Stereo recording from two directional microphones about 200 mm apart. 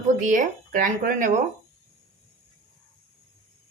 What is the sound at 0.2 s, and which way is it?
Speech, 40° right (ahead or behind).